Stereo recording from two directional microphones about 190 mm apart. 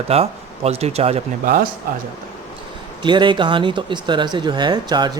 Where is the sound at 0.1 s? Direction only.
30° right (ahead or behind).